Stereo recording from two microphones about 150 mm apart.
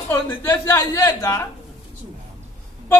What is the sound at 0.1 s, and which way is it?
A woman's voice, 20° left (ahead or behind).